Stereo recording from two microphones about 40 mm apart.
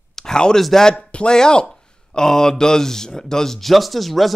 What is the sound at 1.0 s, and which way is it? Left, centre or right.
Speech, left.